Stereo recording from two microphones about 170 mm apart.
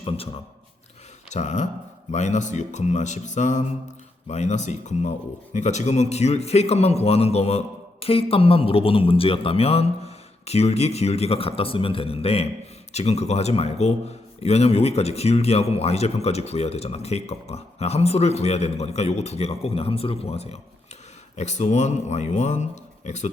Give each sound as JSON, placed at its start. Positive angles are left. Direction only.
{"t": 1.3, "sound": "a man's voice", "side_deg": 45}